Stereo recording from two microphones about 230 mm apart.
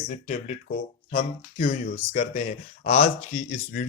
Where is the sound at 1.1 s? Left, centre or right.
Left.